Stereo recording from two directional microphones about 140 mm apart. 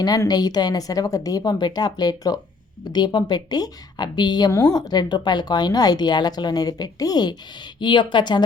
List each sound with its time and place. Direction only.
0.0 s a woman's voice: 25° left (ahead or behind)